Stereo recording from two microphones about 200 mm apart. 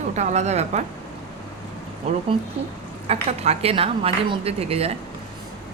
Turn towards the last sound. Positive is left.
turn(degrees=-30)  # may be behind; listen again after turning